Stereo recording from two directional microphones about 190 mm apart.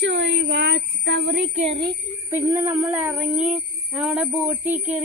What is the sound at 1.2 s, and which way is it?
Speech, 35° right (ahead or behind).